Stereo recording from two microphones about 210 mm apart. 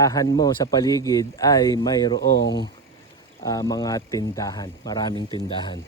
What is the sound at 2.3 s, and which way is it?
Speech, 55° left (ahead or behind).